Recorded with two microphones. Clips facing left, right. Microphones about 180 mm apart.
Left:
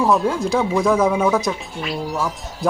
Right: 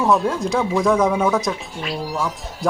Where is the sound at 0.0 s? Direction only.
Centre (ahead or behind).